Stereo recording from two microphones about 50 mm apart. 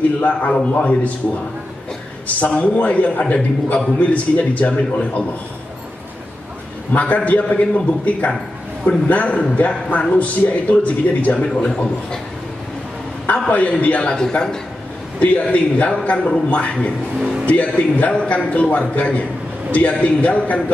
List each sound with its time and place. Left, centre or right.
0.2 s a man's voice: left
2.2 s a man's voice: left
6.9 s a man's voice: left
11.3 s a man's voice: centre
13.3 s a man's voice: left
15.1 s a man's voice: left